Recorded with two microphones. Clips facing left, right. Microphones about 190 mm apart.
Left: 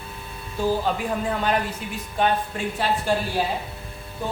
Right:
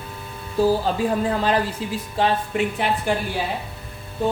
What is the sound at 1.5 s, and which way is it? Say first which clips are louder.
A woman's voice: right 3 dB; 30° right (ahead or behind).